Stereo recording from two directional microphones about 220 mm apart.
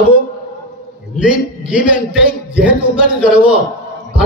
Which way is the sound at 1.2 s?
5° right (ahead or behind).